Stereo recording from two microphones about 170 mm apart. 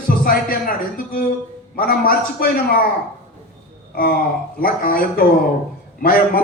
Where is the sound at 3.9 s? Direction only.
60° left (ahead or behind).